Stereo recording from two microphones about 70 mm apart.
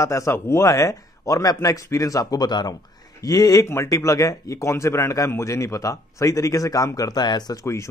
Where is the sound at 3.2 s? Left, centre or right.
Left.